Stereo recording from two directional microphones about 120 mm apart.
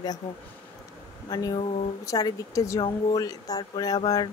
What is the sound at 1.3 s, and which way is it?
Speech, 35° left (ahead or behind).